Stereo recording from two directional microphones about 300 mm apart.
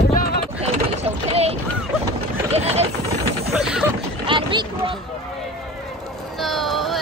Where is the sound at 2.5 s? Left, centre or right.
Right.